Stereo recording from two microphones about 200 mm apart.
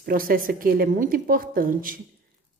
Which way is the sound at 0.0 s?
45° right (ahead or behind).